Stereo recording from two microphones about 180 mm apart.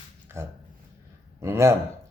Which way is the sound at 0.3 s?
15° right (ahead or behind).